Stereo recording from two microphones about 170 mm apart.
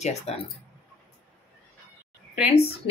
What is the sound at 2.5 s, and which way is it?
Speech, 35° left (ahead or behind).